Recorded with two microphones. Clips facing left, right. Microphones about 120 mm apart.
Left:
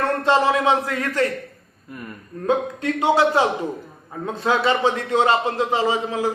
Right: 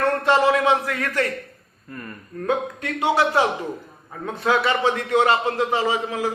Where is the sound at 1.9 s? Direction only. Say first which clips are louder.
Left 1 dB; 15° left (ahead or behind).